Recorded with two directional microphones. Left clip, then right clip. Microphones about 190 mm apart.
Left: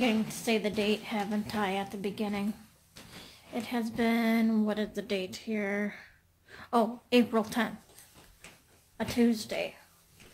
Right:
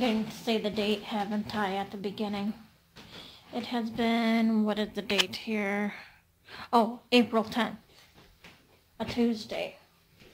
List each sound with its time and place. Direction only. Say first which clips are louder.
0.0 s a woman's voice: even; centre (ahead or behind)
3.5 s a woman's voice: right 1 dB; centre (ahead or behind)
8.9 s speech: left 1 dB; 15° left (ahead or behind)